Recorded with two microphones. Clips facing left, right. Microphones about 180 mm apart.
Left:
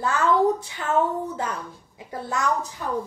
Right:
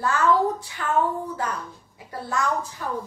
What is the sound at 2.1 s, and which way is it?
Speech, 20° left (ahead or behind).